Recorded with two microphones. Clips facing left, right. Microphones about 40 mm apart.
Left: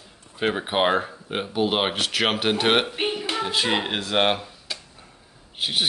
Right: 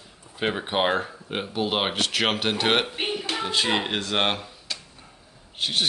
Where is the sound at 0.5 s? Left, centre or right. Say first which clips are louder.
Left 2 dB; centre.